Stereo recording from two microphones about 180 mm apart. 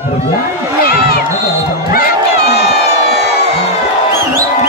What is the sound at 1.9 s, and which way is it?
Crowd, 60° left (ahead or behind).